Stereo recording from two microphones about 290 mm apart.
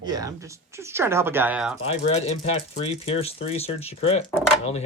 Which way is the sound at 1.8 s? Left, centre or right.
Centre.